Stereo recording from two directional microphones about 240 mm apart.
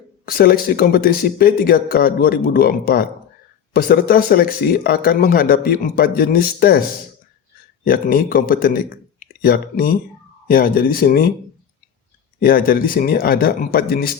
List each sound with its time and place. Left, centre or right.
0.3 s speech: left
7.9 s speech: left
12.4 s speech: left